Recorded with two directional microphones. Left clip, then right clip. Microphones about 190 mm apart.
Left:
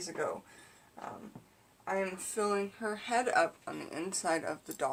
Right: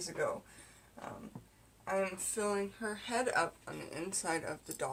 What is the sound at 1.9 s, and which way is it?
Speech, 10° left (ahead or behind).